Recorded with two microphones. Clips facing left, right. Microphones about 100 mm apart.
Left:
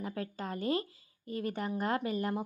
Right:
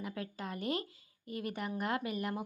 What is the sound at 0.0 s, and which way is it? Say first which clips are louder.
Speech: left 3 dB; 35° left (ahead or behind).